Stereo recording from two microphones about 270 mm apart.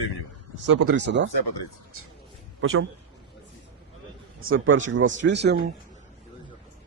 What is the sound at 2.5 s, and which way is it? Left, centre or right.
Speech, right.